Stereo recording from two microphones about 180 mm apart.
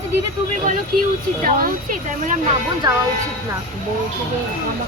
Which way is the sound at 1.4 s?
45° right (ahead or behind).